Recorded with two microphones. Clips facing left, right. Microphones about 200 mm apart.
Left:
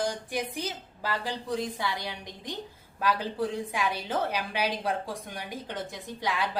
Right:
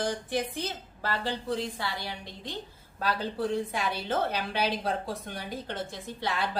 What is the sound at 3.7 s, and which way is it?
A woman's voice, 10° left (ahead or behind).